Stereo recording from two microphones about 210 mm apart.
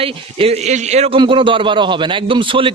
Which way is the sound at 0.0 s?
25° right (ahead or behind).